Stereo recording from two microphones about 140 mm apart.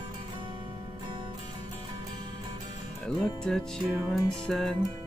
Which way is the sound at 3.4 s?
5° left (ahead or behind).